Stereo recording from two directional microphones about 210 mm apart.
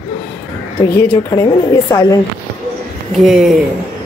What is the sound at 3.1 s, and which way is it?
Speech, centre (ahead or behind).